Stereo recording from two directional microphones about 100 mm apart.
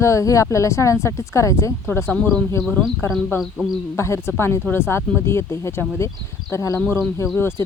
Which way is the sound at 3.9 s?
25° left (ahead or behind).